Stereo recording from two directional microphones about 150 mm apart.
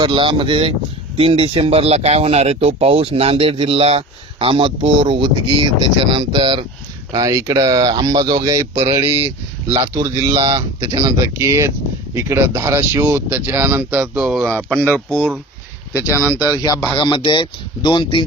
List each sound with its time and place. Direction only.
0.0 s speech: 35° right (ahead or behind)
8.7 s speech: 45° right (ahead or behind)
9.8 s speech: 20° right (ahead or behind)
10.3 s speech: 40° right (ahead or behind); by 14.5 s 5° right (ahead or behind)
14.7 s speech: 10° left (ahead or behind)
17.0 s speech: 35° left (ahead or behind)